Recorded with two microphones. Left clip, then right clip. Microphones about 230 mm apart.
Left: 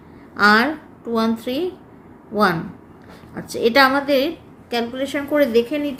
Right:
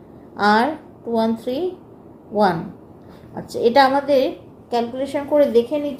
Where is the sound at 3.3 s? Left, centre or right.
Left.